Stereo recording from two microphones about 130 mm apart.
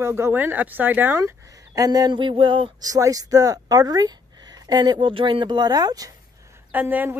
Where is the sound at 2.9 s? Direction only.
25° right (ahead or behind).